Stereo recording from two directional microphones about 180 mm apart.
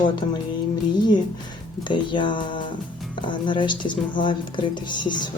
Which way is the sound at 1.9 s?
25° left (ahead or behind).